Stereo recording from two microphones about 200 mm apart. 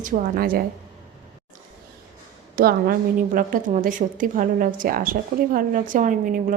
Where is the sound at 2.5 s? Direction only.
50° right (ahead or behind).